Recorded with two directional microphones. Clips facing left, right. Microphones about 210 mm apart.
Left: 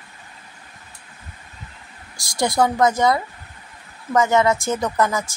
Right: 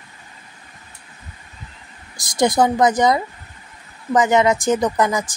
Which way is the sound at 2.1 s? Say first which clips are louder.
Right 3 dB; 20° right (ahead or behind).